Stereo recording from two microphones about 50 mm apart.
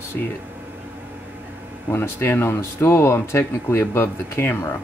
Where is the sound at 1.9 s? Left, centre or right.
Left.